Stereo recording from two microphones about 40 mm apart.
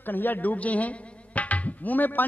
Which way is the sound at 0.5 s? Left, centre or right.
Left.